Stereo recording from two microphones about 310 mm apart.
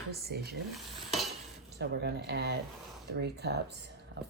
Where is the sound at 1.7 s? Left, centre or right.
Right.